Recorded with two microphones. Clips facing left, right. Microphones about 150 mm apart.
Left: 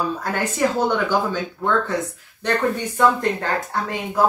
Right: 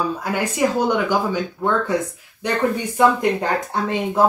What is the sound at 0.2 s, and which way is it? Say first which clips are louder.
Speech: right 1 dB; 10° right (ahead or behind).